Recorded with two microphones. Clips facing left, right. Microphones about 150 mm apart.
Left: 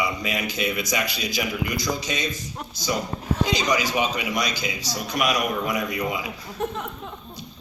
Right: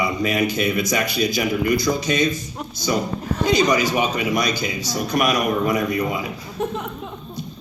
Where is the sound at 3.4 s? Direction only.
55° right (ahead or behind).